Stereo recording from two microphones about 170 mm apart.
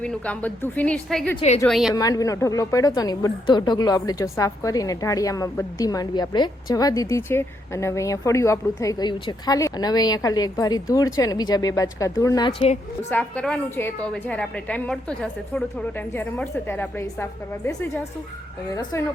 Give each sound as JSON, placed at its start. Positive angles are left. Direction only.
{"t": 0.0, "sound": "a woman's voice", "side_deg": 5}
{"t": 1.4, "sound": "a woman's voice", "side_deg": 40}
{"t": 1.6, "sound": "a woman's voice", "side_deg": 0}
{"t": 1.9, "sound": "a woman's voice", "side_deg": 20}
{"t": 12.5, "sound": "a woman's voice", "side_deg": 40}
{"t": 13.0, "sound": "a woman's voice", "side_deg": 10}